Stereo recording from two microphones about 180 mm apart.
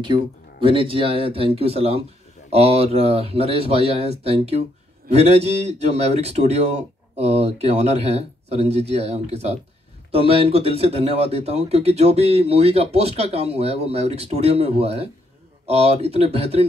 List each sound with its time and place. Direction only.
0.0 s speech: 30° right (ahead or behind)